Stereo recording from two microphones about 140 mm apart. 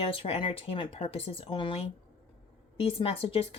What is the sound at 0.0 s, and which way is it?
Speech, 40° left (ahead or behind).